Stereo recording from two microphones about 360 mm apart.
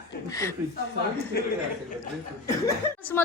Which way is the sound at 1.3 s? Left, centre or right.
Left.